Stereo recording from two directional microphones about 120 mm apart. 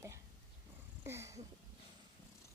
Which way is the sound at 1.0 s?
20° right (ahead or behind).